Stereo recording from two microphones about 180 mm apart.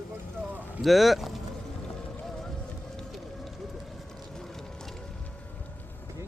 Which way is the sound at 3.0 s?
Centre (ahead or behind).